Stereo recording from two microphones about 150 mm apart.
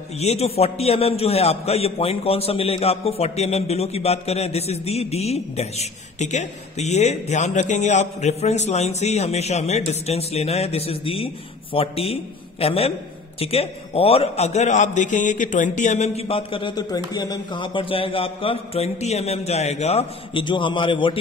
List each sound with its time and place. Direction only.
0.2 s a man's voice: 45° left (ahead or behind)